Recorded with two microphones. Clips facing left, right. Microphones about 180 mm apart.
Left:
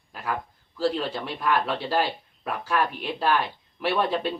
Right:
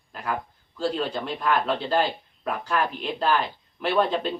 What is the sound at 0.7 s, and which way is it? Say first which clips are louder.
Speech: left 1 dB; centre (ahead or behind).